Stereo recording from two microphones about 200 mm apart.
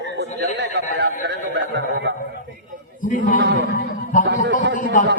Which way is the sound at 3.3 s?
60° right (ahead or behind).